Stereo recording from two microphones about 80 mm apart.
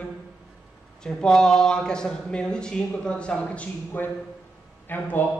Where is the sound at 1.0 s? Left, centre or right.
Centre.